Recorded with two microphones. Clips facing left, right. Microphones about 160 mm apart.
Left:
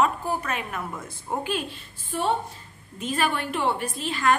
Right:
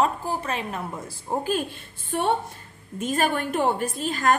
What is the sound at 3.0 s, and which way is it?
A woman's voice, 45° right (ahead or behind).